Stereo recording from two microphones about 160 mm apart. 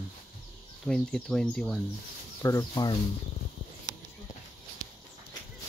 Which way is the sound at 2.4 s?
20° left (ahead or behind).